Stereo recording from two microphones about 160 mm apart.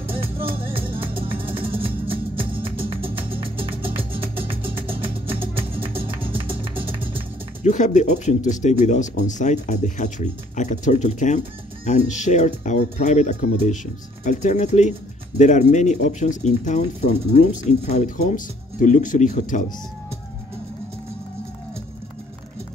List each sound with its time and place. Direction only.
0.1 s music: 35° right (ahead or behind)
7.6 s speech: 50° left (ahead or behind)